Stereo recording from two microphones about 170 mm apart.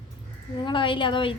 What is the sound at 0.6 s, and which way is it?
Speech, 30° left (ahead or behind).